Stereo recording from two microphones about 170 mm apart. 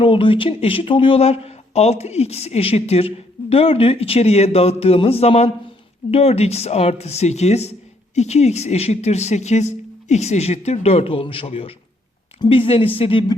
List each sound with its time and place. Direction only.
0.0 s a woman's voice: 30° left (ahead or behind)